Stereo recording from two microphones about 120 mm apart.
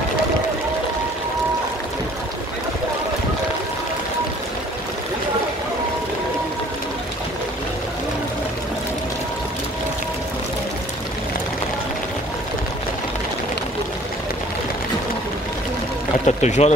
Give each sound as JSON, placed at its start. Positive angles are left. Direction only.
{"t": 16.3, "sound": "speech", "side_deg": 70}